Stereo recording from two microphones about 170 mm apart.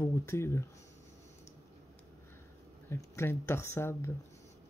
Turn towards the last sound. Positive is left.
turn(degrees=15)  # may be behind; listen again after turning